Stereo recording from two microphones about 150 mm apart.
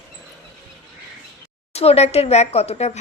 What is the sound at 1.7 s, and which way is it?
Speech, 45° left (ahead or behind).